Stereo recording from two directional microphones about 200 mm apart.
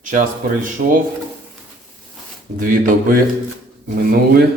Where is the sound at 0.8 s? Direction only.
40° right (ahead or behind).